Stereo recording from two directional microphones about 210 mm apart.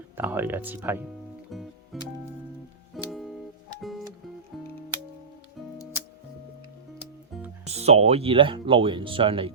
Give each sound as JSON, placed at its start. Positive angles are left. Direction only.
{"t": 0.2, "sound": "speech", "side_deg": -10}
{"t": 1.5, "sound": "music", "side_deg": 0}
{"t": 7.6, "sound": "speech", "side_deg": -30}